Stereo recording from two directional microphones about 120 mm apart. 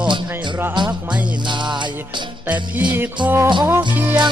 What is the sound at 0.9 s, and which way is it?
Music, 10° right (ahead or behind).